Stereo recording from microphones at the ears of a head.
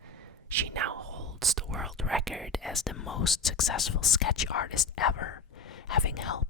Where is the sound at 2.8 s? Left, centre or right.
Left.